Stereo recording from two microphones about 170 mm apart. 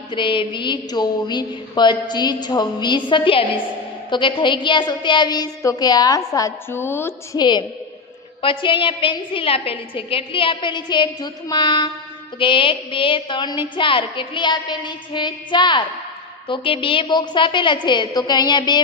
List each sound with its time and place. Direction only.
0.1 s a woman's voice: 30° left (ahead or behind); by 7.4 s 15° left (ahead or behind)
8.4 s a woman's voice: 30° left (ahead or behind)